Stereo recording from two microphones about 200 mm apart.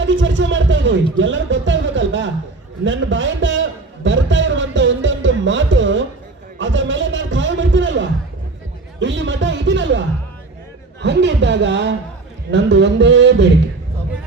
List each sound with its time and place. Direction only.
0.0 s a man's voice: 70° right (ahead or behind)
2.8 s a sound: 70° right (ahead or behind)
11.0 s speech: 60° right (ahead or behind)